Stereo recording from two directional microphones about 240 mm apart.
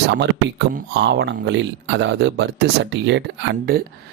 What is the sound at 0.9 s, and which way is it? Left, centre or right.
Speech, right.